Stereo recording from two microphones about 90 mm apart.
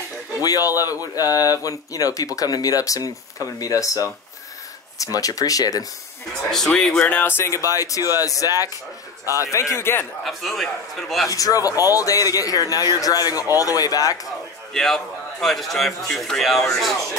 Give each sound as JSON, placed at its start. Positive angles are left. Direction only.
{"t": 0.4, "sound": "speech", "side_deg": 45}
{"t": 6.5, "sound": "speech", "side_deg": 5}
{"t": 7.7, "sound": "speech", "side_deg": 40}
{"t": 9.4, "sound": "speech", "side_deg": 35}
{"t": 10.2, "sound": "a man's voice", "side_deg": 0}
{"t": 11.2, "sound": "speech", "side_deg": 40}
{"t": 14.7, "sound": "a man's voice", "side_deg": 5}